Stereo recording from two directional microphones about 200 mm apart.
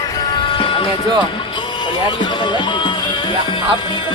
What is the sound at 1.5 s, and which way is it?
Music, 25° left (ahead or behind).